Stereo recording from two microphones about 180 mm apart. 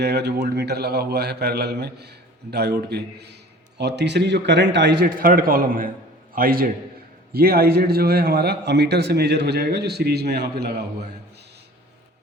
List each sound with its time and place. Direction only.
0.0 s a man's voice: 65° right (ahead or behind)
5.0 s a man's voice: 50° right (ahead or behind)